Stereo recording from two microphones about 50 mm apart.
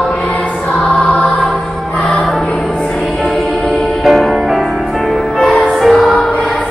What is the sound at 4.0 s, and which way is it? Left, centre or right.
Music, centre.